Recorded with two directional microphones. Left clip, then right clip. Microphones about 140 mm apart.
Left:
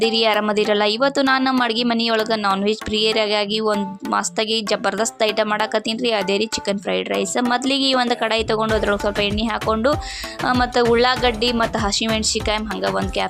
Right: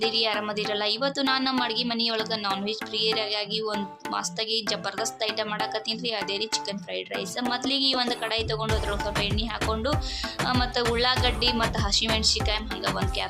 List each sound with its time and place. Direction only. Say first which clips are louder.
0.0 s a woman's voice: left 8 dB; 60° left (ahead or behind)